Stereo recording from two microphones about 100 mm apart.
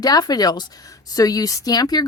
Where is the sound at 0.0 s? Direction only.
40° left (ahead or behind).